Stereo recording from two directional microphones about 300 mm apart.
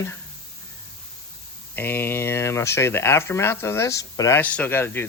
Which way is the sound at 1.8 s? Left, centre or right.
Centre.